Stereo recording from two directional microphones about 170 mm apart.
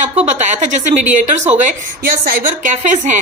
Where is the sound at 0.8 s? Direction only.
45° right (ahead or behind).